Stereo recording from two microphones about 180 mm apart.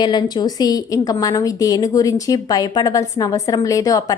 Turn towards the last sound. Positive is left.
turn(degrees=20)  # may be behind; listen again after turning